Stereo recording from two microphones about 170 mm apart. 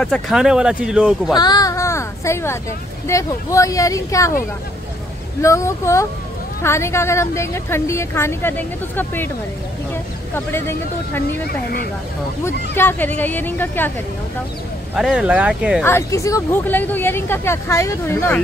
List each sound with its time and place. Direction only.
0.0 s speech: centre (ahead or behind)
1.3 s a sound: 25° left (ahead or behind)
3.1 s speech: 20° left (ahead or behind)
5.4 s a woman's voice: 15° left (ahead or behind)
10.3 s a woman's voice: 15° left (ahead or behind)
11.4 s speech: 65° left (ahead or behind)
12.4 s a woman's voice: 10° left (ahead or behind)
15.0 s speech: 5° right (ahead or behind)
15.8 s a woman's voice: 15° left (ahead or behind)